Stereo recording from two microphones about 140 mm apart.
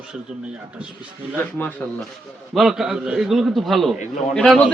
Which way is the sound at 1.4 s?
10° left (ahead or behind).